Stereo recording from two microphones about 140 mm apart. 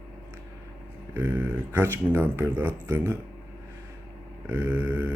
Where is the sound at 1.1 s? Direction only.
15° right (ahead or behind).